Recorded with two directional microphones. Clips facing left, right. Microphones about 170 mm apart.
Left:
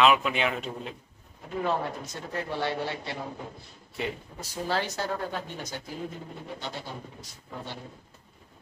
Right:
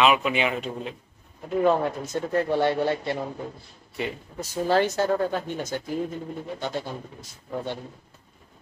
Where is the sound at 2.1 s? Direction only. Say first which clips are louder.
Right 10 dB; 50° right (ahead or behind).